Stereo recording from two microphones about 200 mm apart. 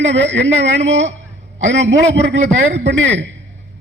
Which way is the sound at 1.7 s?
65° right (ahead or behind).